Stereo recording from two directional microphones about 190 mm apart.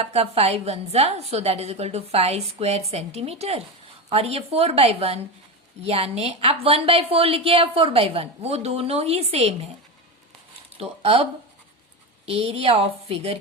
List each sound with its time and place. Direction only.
0.0 s a woman's voice: 30° right (ahead or behind)
10.8 s a woman's voice: 30° right (ahead or behind)